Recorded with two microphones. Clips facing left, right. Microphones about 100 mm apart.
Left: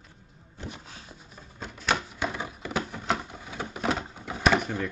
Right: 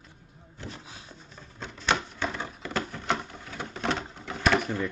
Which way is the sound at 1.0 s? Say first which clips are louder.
Even; 10° left (ahead or behind).